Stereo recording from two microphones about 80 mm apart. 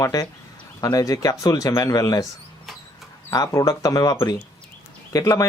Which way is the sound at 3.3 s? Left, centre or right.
Left.